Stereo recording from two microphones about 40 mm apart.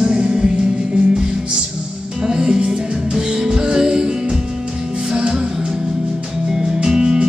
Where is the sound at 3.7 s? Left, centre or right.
Centre.